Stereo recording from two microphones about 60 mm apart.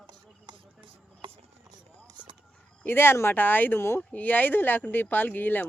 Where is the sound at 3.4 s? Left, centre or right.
Left.